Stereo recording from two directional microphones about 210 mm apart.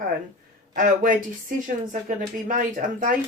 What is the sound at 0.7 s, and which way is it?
Speech, 40° right (ahead or behind).